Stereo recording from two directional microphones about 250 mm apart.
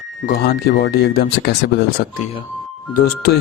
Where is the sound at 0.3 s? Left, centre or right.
Left.